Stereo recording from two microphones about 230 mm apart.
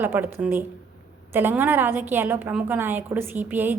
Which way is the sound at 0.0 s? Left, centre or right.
Centre.